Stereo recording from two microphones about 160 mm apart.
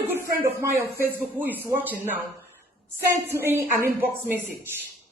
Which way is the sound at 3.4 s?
15° right (ahead or behind).